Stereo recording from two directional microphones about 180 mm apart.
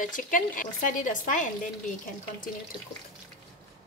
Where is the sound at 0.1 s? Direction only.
50° left (ahead or behind).